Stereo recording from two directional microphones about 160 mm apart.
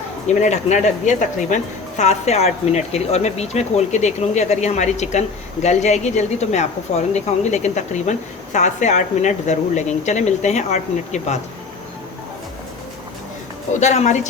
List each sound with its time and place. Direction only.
0.3 s speech: 45° left (ahead or behind)
13.7 s speech: 45° left (ahead or behind)